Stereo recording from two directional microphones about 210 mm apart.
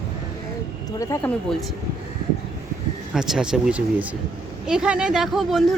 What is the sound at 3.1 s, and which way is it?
Speech, centre (ahead or behind).